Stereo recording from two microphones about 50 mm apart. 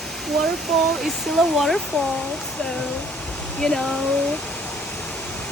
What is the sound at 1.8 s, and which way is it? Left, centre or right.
Speech, centre.